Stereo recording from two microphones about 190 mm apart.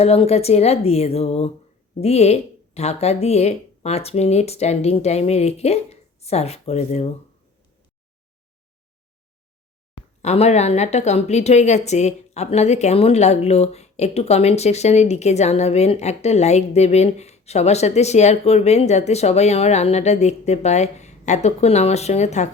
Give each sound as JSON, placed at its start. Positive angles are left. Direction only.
{"t": 0.0, "sound": "a woman's voice", "side_deg": 35}
{"t": 10.2, "sound": "a woman's voice", "side_deg": 35}